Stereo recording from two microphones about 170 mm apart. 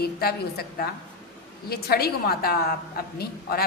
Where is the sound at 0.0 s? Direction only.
65° left (ahead or behind).